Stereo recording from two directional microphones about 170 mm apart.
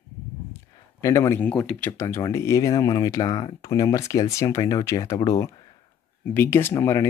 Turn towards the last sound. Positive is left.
turn(degrees=15)  # may be behind; listen again after turning